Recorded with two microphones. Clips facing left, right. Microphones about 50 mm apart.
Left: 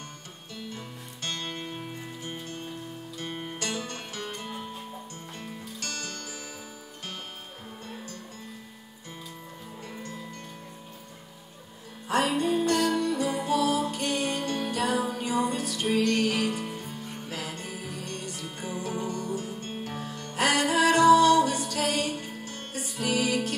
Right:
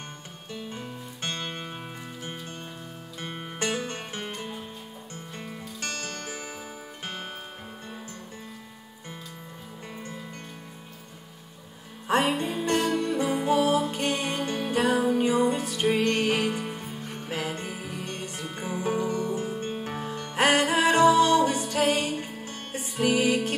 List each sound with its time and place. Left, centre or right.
0.5 s music: right
3.3 s music: right
5.8 s music: right
12.1 s music: right